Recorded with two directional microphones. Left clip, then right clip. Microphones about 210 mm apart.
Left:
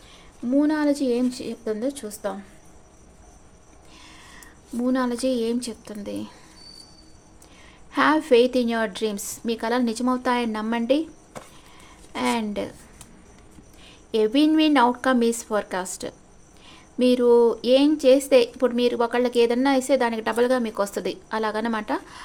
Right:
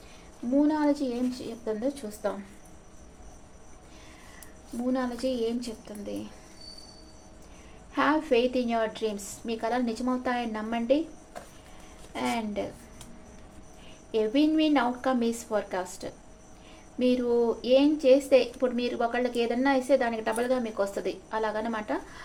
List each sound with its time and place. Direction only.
0.5 s a woman's voice: 40° left (ahead or behind)
4.9 s a woman's voice: 45° left (ahead or behind)
7.9 s a woman's voice: 45° left (ahead or behind)
12.1 s a woman's voice: 45° left (ahead or behind)
14.1 s a woman's voice: 45° left (ahead or behind)